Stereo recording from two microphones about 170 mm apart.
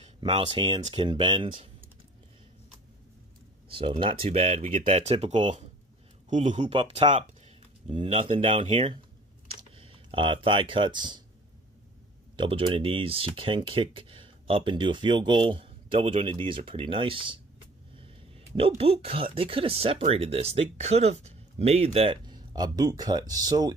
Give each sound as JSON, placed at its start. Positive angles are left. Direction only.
{"t": 0.6, "sound": "speech", "side_deg": -30}
{"t": 3.7, "sound": "speech", "side_deg": -30}
{"t": 6.6, "sound": "speech", "side_deg": -30}
{"t": 12.4, "sound": "speech", "side_deg": -30}
{"t": 18.6, "sound": "speech", "side_deg": -35}